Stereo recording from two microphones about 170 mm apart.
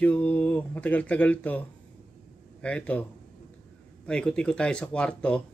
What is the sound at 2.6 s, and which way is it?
Speech, 5° left (ahead or behind).